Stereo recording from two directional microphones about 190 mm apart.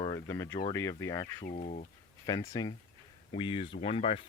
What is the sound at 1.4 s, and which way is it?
Speech, 40° left (ahead or behind).